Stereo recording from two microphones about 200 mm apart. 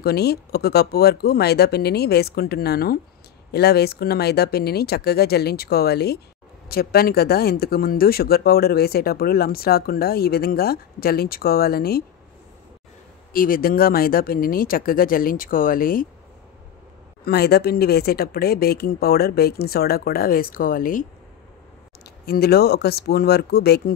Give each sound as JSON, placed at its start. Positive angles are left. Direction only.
{"t": 0.0, "sound": "speech", "side_deg": 55}
{"t": 13.3, "sound": "speech", "side_deg": 45}
{"t": 17.2, "sound": "speech", "side_deg": 55}
{"t": 22.0, "sound": "speech", "side_deg": 50}